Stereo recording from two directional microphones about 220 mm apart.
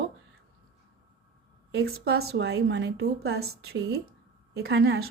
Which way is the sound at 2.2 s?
50° right (ahead or behind).